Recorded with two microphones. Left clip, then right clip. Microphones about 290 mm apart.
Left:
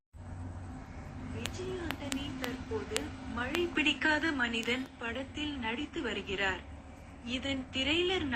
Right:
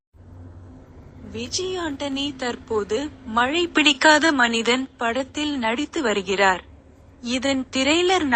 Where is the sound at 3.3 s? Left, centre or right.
Right.